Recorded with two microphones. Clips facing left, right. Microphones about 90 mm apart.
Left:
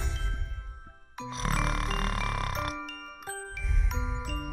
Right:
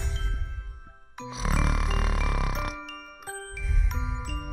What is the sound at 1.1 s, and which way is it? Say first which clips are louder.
Music: right 1 dB; centre (ahead or behind).